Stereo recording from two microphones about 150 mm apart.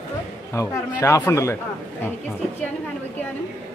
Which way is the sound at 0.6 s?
20° left (ahead or behind).